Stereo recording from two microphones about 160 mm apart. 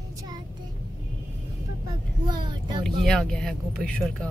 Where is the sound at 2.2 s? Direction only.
25° right (ahead or behind).